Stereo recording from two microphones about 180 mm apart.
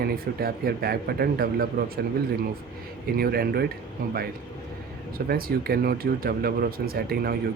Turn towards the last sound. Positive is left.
turn(degrees=-55)  # may be behind; listen again after turning